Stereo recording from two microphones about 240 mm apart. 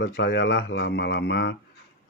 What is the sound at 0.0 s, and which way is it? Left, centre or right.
Speech, left.